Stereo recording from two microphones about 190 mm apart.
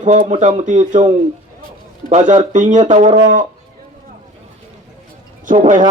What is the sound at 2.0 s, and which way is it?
A man's voice, 40° right (ahead or behind).